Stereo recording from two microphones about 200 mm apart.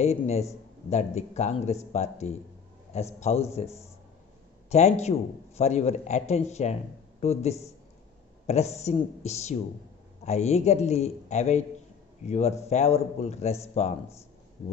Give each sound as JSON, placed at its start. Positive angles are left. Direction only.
{"t": 0.0, "sound": "speech", "side_deg": 35}
{"t": 4.6, "sound": "a man's voice", "side_deg": 35}